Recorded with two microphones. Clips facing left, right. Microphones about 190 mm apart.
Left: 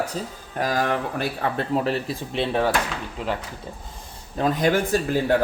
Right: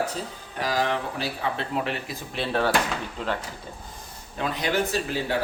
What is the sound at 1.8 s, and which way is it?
Speech, 30° left (ahead or behind).